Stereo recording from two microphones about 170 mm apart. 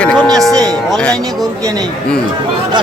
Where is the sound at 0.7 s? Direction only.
5° left (ahead or behind).